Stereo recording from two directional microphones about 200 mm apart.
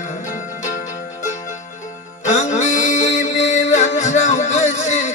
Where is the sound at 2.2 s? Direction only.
35° left (ahead or behind).